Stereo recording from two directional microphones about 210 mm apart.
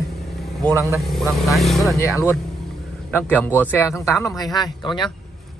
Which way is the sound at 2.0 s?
15° left (ahead or behind).